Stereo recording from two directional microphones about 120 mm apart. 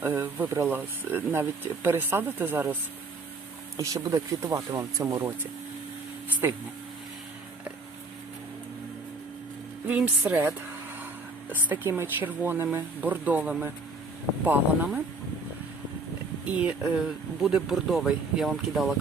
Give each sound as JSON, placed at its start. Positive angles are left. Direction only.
{"t": 0.0, "sound": "speech", "side_deg": -20}
{"t": 3.8, "sound": "speech", "side_deg": -30}
{"t": 6.4, "sound": "speech", "side_deg": -20}
{"t": 9.8, "sound": "speech", "side_deg": -15}
{"t": 16.6, "sound": "speech", "side_deg": -10}